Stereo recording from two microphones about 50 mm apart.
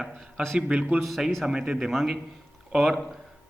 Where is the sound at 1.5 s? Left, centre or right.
Centre.